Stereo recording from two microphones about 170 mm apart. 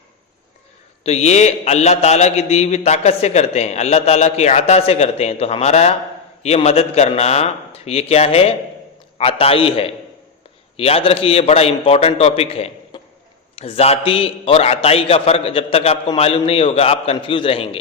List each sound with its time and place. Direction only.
1.0 s a man's voice: 40° left (ahead or behind)